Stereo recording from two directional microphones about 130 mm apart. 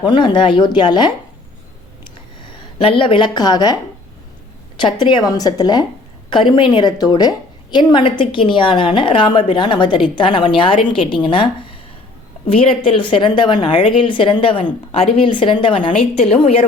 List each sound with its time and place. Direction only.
0.0 s a woman's voice: 40° left (ahead or behind)
2.7 s a woman's voice: 40° left (ahead or behind)
4.8 s a woman's voice: 35° left (ahead or behind)